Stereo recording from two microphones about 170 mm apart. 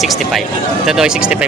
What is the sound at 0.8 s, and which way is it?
Speech, 5° right (ahead or behind).